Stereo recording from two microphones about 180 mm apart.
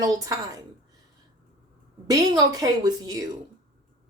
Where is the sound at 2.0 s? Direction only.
20° right (ahead or behind).